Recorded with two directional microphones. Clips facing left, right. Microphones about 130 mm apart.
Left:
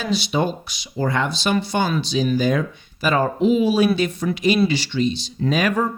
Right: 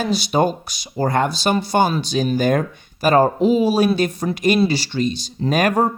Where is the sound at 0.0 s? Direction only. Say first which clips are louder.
Right 3 dB; 45° right (ahead or behind).